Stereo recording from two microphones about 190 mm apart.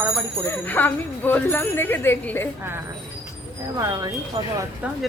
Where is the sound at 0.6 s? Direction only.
10° left (ahead or behind).